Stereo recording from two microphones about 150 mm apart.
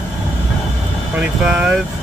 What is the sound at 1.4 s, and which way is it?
Speech, 10° right (ahead or behind).